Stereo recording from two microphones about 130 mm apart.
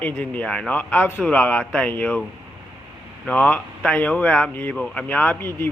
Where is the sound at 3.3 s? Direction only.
10° left (ahead or behind).